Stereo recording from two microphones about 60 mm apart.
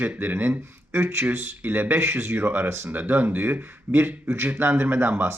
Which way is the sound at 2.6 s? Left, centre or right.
Right.